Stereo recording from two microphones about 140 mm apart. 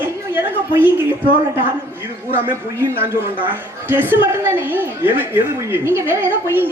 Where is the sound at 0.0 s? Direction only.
15° right (ahead or behind).